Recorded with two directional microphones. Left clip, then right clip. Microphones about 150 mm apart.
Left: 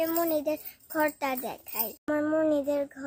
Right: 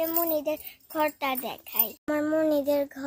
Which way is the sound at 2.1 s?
20° right (ahead or behind).